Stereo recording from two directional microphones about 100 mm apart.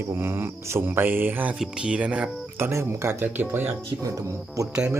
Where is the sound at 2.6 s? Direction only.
25° right (ahead or behind).